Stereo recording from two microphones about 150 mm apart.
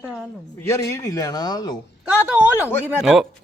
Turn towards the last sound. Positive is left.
turn(degrees=0)  # may be behind; listen again after turning